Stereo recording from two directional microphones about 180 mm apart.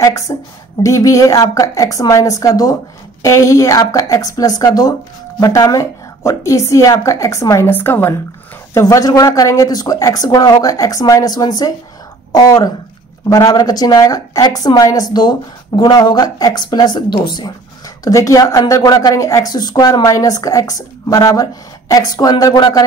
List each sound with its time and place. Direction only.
0.0 s a woman's voice: 20° left (ahead or behind)